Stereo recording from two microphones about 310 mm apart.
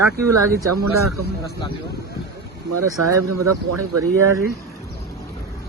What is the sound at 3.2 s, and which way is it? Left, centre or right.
Speech, right.